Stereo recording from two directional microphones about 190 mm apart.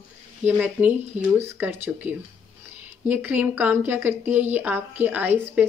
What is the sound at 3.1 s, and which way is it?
Speech, 10° right (ahead or behind).